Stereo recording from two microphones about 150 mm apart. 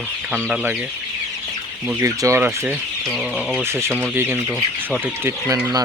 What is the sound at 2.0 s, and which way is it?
Speech, 20° right (ahead or behind).